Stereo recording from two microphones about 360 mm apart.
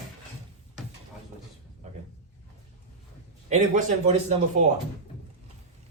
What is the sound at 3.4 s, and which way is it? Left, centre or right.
Speech, centre.